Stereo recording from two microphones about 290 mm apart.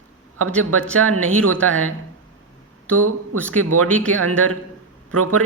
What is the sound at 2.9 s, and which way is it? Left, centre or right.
Speech, right.